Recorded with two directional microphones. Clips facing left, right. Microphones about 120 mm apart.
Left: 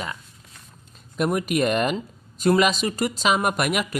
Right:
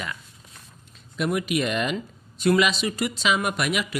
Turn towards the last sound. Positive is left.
turn(degrees=45)  # may be behind; listen again after turning